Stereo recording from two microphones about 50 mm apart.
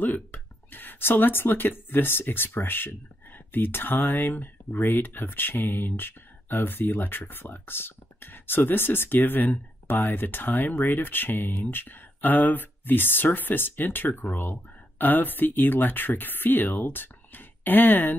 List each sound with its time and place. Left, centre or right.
0.0 s speech: left